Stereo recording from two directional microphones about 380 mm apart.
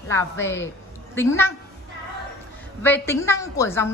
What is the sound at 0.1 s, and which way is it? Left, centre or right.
A woman's voice, centre.